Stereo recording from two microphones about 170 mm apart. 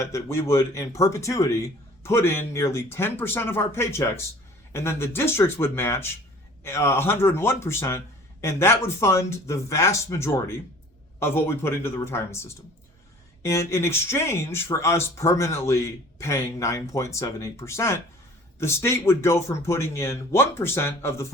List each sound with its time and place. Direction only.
0.0 s speech: 15° left (ahead or behind)